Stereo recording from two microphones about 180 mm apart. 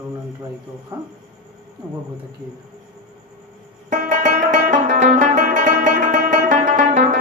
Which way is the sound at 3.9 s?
45° right (ahead or behind).